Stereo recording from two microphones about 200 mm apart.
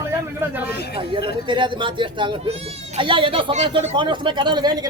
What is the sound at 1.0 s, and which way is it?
Speech, 25° right (ahead or behind).